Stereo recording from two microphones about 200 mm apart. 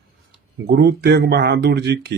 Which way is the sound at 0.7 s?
55° right (ahead or behind).